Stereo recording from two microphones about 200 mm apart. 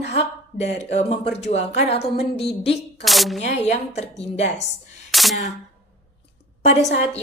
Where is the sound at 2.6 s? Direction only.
30° left (ahead or behind).